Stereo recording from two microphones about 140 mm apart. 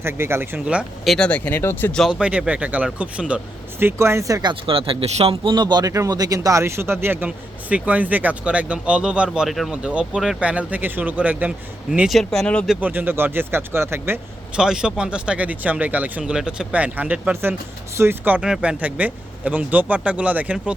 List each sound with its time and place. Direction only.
0.0 s speech: 15° right (ahead or behind); by 2.0 s 15° left (ahead or behind)
2.0 s speech: 5° right (ahead or behind); by 4.5 s 25° right (ahead or behind)
4.6 s speech: 40° right (ahead or behind); by 12.6 s 5° left (ahead or behind)
12.6 s speech: 10° right (ahead or behind)
14.6 s speech: 5° right (ahead or behind)